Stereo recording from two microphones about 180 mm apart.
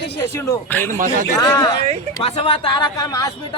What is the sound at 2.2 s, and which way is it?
Speech, 35° left (ahead or behind).